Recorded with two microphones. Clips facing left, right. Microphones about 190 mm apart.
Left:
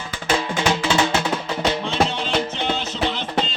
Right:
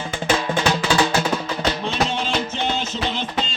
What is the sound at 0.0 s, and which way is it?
Music, 25° right (ahead or behind).